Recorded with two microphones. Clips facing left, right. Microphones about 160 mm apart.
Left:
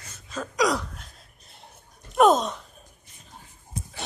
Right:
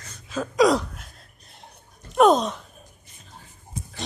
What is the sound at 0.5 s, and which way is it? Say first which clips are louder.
Gasp: right 6 dB; 25° right (ahead or behind).